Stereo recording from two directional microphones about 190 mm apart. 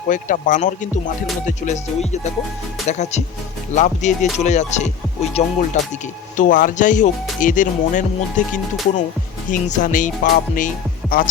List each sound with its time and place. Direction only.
0.1 s speech: 45° left (ahead or behind)
1.5 s music: 40° left (ahead or behind)
7.3 s speech: 45° left (ahead or behind)